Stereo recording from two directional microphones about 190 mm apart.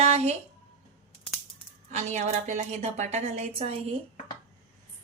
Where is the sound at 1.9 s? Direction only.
35° right (ahead or behind).